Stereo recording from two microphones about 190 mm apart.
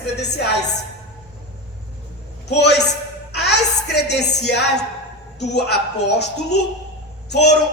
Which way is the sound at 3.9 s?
60° left (ahead or behind).